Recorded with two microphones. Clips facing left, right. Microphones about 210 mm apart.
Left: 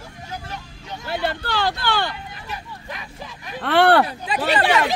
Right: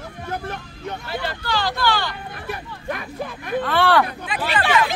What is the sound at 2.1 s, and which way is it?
Speech, 55° right (ahead or behind).